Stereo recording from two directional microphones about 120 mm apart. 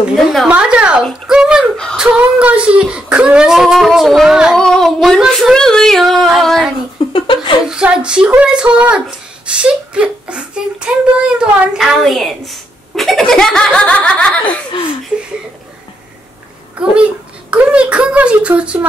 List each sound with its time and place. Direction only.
0.1 s speech: centre (ahead or behind)
0.5 s speech: 10° right (ahead or behind)
1.0 s a sound: 5° right (ahead or behind)
2.0 s speech: 10° right (ahead or behind)
7.1 s laughter: 45° left (ahead or behind)
7.6 s speech: 5° right (ahead or behind); by 14.4 s 10° left (ahead or behind)
16.8 s speech: 10° right (ahead or behind)